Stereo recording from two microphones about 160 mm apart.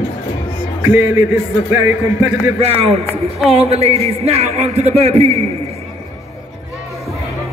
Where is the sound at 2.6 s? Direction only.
40° right (ahead or behind).